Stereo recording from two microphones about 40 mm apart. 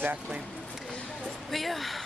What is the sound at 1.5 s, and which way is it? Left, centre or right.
Speech, centre.